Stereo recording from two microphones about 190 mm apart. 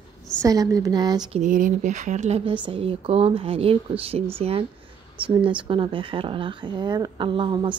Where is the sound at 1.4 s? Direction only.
45° right (ahead or behind).